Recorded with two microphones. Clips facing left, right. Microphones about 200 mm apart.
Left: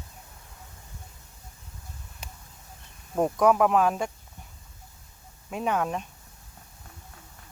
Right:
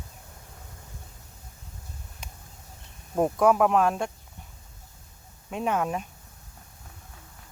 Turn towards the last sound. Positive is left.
turn(degrees=0)  # may be behind; listen again after turning